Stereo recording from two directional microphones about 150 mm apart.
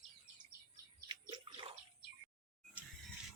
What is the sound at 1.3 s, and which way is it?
Bathtub, 35° right (ahead or behind).